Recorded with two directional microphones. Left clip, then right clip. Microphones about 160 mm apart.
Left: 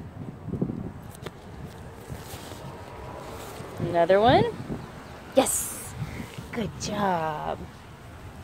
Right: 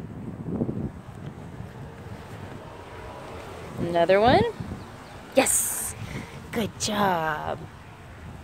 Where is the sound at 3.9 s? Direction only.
25° right (ahead or behind).